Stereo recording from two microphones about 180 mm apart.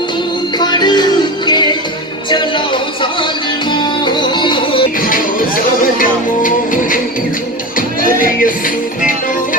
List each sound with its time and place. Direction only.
0.6 s music: 25° left (ahead or behind)
3.7 s music: 25° left (ahead or behind)
4.9 s music: 50° left (ahead or behind)